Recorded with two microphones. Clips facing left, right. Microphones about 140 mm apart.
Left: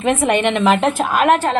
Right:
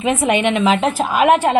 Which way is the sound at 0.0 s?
5° right (ahead or behind).